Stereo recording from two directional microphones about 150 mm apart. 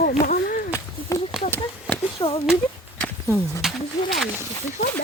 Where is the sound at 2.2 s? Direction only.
30° left (ahead or behind).